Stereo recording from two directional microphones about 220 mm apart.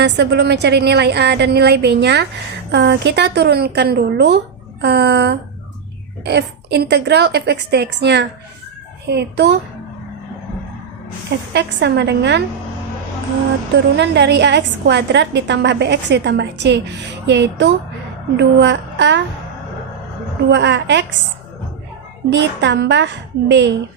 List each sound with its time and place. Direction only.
0.0 s a woman's voice: 50° right (ahead or behind)
11.3 s a woman's voice: 50° right (ahead or behind)
13.9 s a woman's voice: 50° right (ahead or behind)
20.5 s a woman's voice: 50° right (ahead or behind)
22.3 s a woman's voice: 50° right (ahead or behind)